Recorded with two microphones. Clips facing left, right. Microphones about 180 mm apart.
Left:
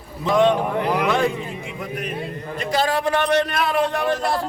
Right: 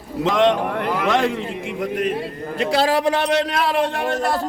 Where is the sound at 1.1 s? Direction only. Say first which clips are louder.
Right 1 dB; 90° right.